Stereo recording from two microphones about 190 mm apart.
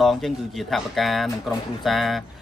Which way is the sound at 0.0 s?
Centre (ahead or behind).